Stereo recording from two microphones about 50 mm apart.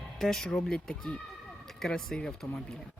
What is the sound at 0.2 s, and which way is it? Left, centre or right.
Speech, centre.